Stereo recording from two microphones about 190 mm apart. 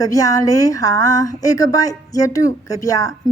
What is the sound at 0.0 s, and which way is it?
A woman's voice, 20° left (ahead or behind).